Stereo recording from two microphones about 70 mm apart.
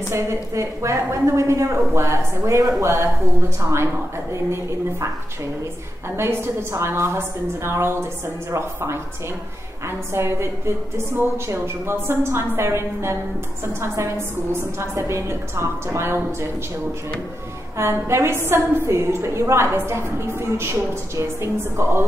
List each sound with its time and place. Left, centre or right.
0.1 s a woman's voice: right
6.1 s a woman's voice: right
17.7 s a woman's voice: right